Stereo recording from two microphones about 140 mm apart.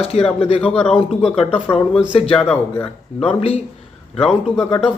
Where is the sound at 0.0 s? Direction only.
45° left (ahead or behind).